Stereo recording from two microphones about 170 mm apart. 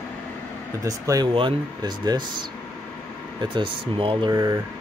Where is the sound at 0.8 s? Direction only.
20° right (ahead or behind).